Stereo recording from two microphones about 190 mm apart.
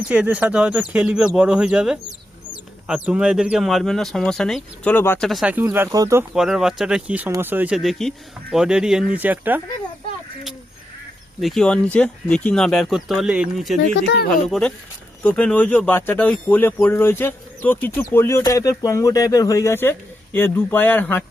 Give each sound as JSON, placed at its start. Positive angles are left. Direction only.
{"t": 0.1, "sound": "speech", "side_deg": -5}
{"t": 6.3, "sound": "speech", "side_deg": -5}
{"t": 11.3, "sound": "speech", "side_deg": 0}
{"t": 14.0, "sound": "speech", "side_deg": 60}
{"t": 15.2, "sound": "speech", "side_deg": 5}